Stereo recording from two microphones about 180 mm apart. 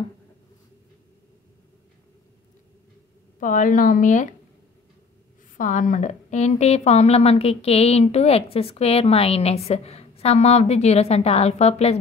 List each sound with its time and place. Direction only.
3.3 s speech: 45° left (ahead or behind)
5.6 s a woman's voice: 45° left (ahead or behind)